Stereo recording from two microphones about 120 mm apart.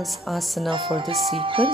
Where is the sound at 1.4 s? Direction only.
45° right (ahead or behind).